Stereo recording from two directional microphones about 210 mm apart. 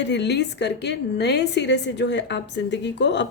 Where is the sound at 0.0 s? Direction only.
55° left (ahead or behind).